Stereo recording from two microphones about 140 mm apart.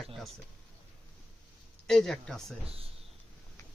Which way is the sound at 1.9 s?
5° left (ahead or behind).